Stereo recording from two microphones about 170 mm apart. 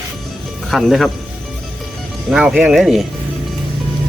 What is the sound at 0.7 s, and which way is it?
Speech, centre (ahead or behind).